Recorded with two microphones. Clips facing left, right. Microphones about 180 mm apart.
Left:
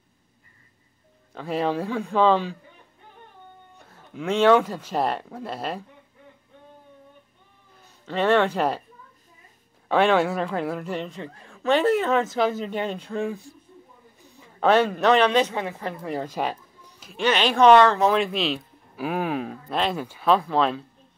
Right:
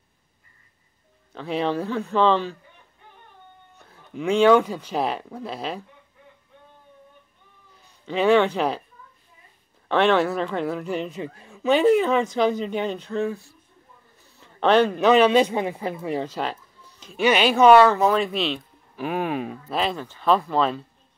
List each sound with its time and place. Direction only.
1.3 s a man's voice: 5° left (ahead or behind)
3.8 s speech: centre (ahead or behind)
8.0 s speech: centre (ahead or behind)
9.8 s speech: 10° left (ahead or behind)
14.2 s a sound: 5° left (ahead or behind)
14.9 s speech: 5° right (ahead or behind)
16.3 s a sound: 15° left (ahead or behind)
17.2 s speech: 10° right (ahead or behind)